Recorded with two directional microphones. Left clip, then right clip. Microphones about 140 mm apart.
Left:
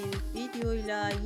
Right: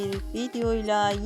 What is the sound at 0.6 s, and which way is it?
Speech, 35° right (ahead or behind).